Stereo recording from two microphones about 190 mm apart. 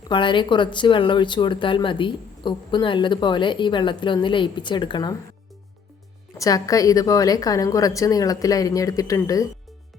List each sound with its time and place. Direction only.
0.1 s speech: 25° left (ahead or behind)
6.4 s a woman's voice: 20° left (ahead or behind)